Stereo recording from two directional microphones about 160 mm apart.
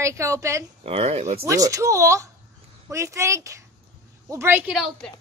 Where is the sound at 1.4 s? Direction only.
20° right (ahead or behind).